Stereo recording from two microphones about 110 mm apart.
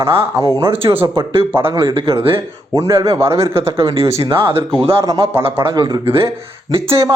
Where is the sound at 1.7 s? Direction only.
50° right (ahead or behind).